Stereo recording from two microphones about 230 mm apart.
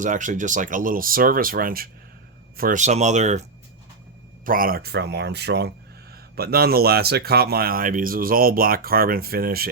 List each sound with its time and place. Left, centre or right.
0.0 s speech: right
4.4 s speech: right